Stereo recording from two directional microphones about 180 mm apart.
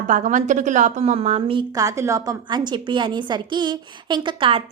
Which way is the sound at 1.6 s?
20° right (ahead or behind).